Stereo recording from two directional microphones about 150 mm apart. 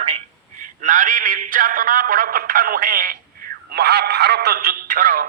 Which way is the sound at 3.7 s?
90° right.